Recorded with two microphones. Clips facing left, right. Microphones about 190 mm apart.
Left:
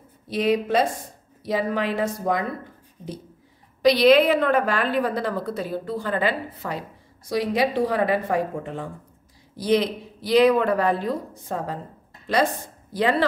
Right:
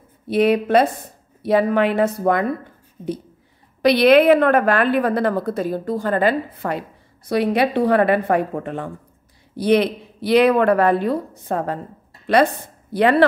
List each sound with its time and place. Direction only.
0.3 s a woman's voice: 60° right (ahead or behind)
3.8 s a woman's voice: 60° right (ahead or behind)
12.9 s a woman's voice: 65° right (ahead or behind)